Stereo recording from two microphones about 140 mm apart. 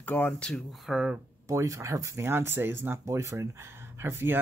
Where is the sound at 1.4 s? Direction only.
20° right (ahead or behind).